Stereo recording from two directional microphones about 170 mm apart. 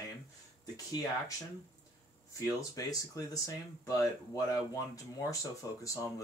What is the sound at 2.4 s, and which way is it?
Speech, 20° left (ahead or behind).